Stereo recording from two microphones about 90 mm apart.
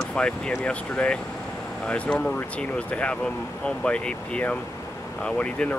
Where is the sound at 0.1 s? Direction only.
10° left (ahead or behind).